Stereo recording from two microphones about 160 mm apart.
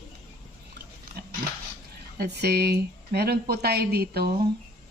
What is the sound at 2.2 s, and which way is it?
Speech, 85° right.